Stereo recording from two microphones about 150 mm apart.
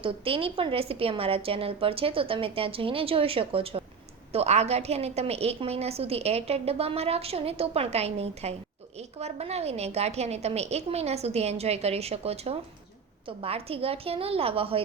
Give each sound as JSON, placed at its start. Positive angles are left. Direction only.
{"t": 0.0, "sound": "a woman's voice", "side_deg": -40}